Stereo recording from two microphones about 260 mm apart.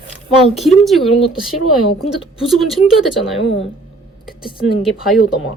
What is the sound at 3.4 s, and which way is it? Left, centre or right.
Speech, left.